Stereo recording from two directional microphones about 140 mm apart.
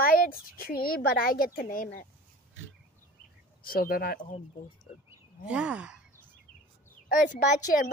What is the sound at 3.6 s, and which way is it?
Speech, 90° left.